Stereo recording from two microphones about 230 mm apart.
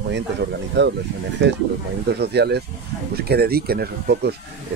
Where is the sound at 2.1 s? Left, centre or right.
Right.